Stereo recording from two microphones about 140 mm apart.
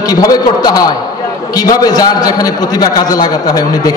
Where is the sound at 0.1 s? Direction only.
30° left (ahead or behind).